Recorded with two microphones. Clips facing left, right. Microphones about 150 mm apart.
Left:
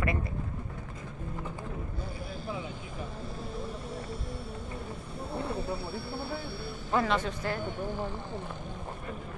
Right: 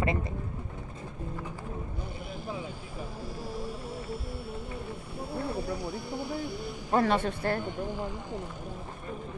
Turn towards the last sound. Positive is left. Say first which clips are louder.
# right 3 dB
turn(degrees=-55)  # may be behind; listen again after turning